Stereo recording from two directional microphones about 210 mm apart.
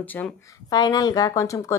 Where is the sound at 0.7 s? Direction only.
20° left (ahead or behind).